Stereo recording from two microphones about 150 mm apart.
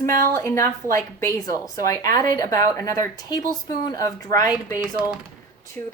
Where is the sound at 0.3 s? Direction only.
20° left (ahead or behind).